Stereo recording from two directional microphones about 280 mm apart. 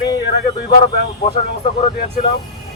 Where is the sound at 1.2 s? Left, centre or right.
Left.